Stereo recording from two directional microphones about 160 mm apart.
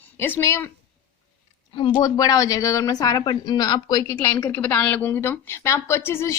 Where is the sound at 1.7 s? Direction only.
30° left (ahead or behind).